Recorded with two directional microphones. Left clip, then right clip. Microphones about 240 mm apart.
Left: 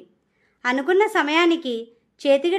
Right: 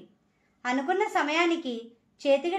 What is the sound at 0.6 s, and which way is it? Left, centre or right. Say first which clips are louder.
A woman's voice: left 8 dB; left.